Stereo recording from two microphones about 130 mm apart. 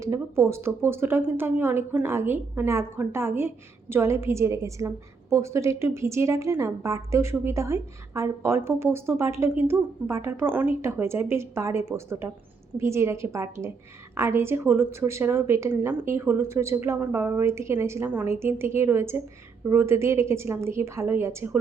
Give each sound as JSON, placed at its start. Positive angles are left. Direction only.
{"t": 0.0, "sound": "a woman's voice", "side_deg": -20}